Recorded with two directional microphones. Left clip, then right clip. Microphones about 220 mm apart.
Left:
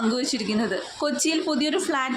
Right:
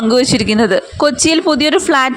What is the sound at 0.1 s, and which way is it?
Speech, 40° right (ahead or behind).